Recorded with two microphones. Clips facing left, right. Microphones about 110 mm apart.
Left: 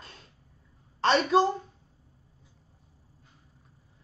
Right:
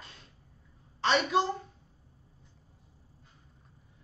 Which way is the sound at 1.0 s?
40° left (ahead or behind).